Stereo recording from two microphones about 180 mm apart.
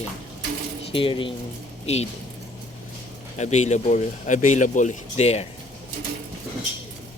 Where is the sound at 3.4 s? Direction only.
40° left (ahead or behind).